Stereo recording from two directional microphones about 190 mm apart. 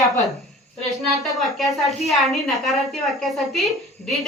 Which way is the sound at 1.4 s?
Centre (ahead or behind).